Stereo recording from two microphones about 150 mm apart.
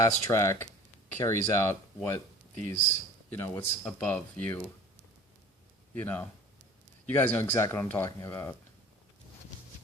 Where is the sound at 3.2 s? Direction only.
15° left (ahead or behind).